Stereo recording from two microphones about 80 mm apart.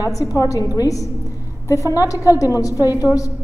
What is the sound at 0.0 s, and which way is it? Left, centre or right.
A woman's voice, left.